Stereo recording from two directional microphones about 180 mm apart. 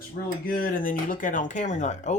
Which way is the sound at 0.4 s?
50° left (ahead or behind).